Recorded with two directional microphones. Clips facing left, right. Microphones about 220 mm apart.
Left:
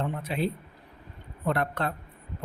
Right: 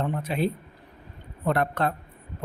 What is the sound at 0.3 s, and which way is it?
Speech, 45° right (ahead or behind).